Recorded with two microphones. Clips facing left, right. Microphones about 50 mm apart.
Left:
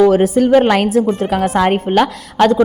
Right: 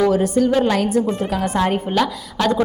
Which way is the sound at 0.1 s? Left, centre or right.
Left.